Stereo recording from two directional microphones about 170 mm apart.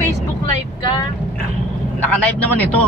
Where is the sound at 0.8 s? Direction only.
25° left (ahead or behind).